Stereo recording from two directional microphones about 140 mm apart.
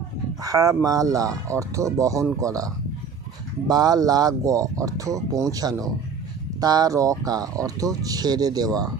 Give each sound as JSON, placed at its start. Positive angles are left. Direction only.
{"t": 0.4, "sound": "speech", "side_deg": -25}